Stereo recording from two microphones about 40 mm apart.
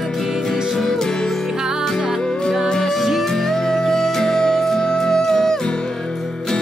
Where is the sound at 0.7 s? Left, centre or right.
Centre.